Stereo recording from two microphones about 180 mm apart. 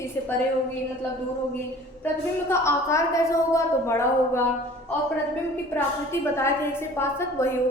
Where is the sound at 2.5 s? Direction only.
15° left (ahead or behind).